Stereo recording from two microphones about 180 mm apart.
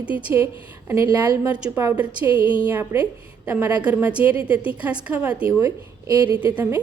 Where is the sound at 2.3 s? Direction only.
25° left (ahead or behind).